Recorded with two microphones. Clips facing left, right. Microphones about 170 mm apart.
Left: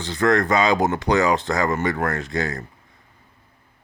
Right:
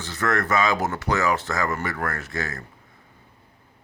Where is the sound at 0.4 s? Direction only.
15° left (ahead or behind).